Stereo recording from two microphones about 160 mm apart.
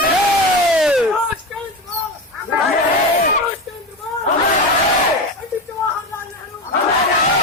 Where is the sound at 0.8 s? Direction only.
Centre (ahead or behind).